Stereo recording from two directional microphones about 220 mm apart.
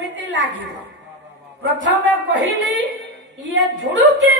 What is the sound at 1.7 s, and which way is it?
Speech, 55° right (ahead or behind).